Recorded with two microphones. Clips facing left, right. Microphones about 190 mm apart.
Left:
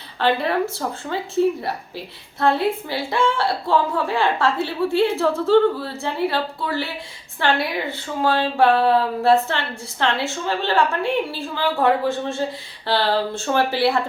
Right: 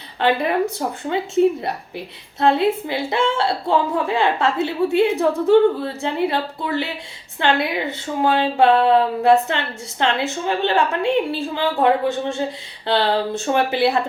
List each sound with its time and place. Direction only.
0.2 s a woman's voice: 15° right (ahead or behind)